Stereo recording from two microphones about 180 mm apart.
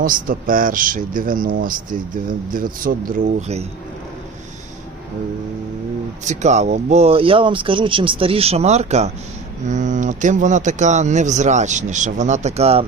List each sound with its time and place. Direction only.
0.0 s speech: 50° right (ahead or behind)
6.2 s a man's voice: 40° right (ahead or behind)